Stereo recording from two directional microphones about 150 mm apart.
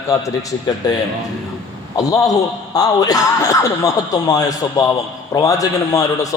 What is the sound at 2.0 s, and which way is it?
A man's voice, 20° left (ahead or behind).